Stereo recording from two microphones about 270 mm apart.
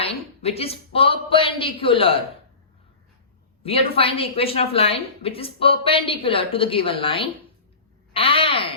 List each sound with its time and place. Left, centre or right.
0.4 s a woman's voice: left
3.6 s a woman's voice: left